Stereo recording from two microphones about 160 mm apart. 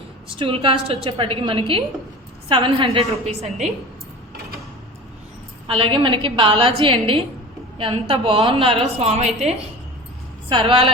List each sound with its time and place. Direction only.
0.3 s a woman's voice: 35° right (ahead or behind)
5.6 s a woman's voice: 35° right (ahead or behind)
10.5 s a woman's voice: 35° right (ahead or behind)